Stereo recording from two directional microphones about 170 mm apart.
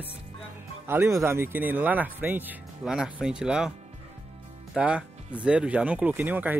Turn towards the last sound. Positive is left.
turn(degrees=-10)  # may be behind; listen again after turning